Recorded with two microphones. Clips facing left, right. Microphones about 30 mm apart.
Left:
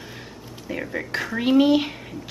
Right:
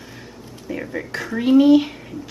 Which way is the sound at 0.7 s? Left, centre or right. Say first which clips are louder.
Right 1 dB; centre.